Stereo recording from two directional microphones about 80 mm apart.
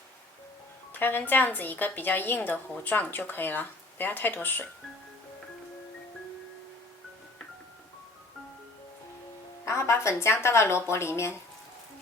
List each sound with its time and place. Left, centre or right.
0.9 s a woman's voice: left
9.6 s speech: left